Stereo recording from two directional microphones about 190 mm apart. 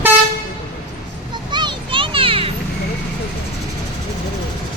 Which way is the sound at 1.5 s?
25° right (ahead or behind).